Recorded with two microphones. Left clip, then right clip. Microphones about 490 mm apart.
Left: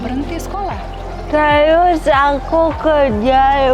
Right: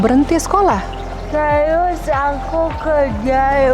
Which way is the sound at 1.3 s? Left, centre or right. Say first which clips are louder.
Left 4 dB; left.